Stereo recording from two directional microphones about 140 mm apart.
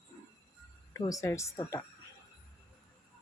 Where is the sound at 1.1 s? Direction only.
20° left (ahead or behind).